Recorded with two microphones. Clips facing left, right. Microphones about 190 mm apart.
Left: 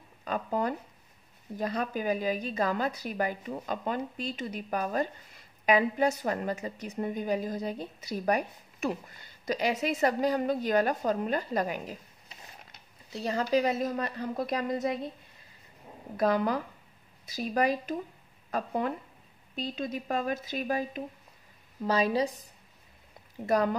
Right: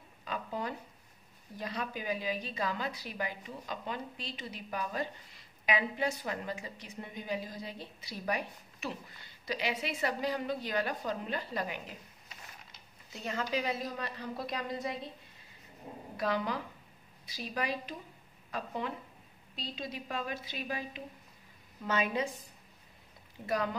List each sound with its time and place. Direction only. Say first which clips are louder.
0.2 s a sound: left 7 dB; 45° left (ahead or behind)
1.6 s a woman's voice: left 7 dB; 45° left (ahead or behind)
13.1 s a woman's voice: left 8 dB; 35° left (ahead or behind)
16.2 s a woman's voice: left 7 dB; 45° left (ahead or behind)
23.4 s a woman's voice: left 7 dB; 45° left (ahead or behind)